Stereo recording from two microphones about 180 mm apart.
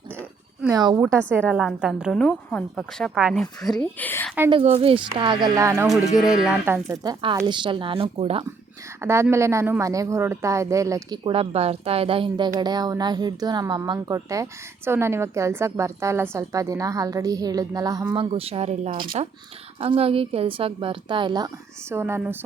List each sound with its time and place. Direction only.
0.6 s a woman's voice: 20° right (ahead or behind)
1.5 s a woman's voice: 5° right (ahead or behind)
3.2 s a woman's voice: 5° right (ahead or behind)
4.0 s a woman's voice: 10° left (ahead or behind)
4.6 s a woman's voice: 35° right (ahead or behind); by 5.9 s 15° right (ahead or behind)
6.1 s a woman's voice: 5° right (ahead or behind)
6.8 s a woman's voice: 20° right (ahead or behind)
9.0 s a woman's voice: 15° right (ahead or behind)